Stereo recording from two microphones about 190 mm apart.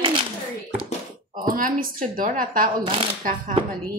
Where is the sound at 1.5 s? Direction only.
45° right (ahead or behind).